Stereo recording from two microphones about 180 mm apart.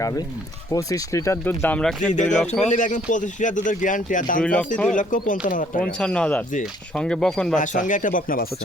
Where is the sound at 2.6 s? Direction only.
45° left (ahead or behind).